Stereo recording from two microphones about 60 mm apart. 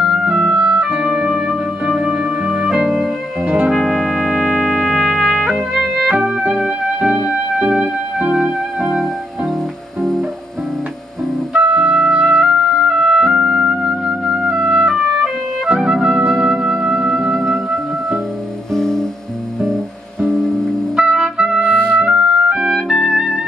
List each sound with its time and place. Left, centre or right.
0.0 s clarinet: centre
0.6 s music: centre
3.7 s trumpet: centre
6.3 s music: centre
8.4 s music: centre
11.5 s clarinet: centre
13.3 s music: centre
14.5 s clarinet: centre
15.7 s music: centre
18.7 s music: centre
20.2 s music: centre
20.9 s music: centre
22.8 s trumpet: centre